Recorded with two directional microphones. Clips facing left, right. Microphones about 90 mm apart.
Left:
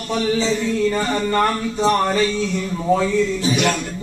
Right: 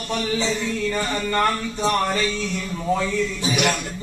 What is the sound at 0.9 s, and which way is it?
Speech, 25° left (ahead or behind).